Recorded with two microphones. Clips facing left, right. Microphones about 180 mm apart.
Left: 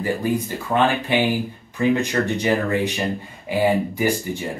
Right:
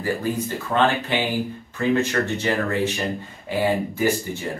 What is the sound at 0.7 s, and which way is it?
Speech, 15° left (ahead or behind).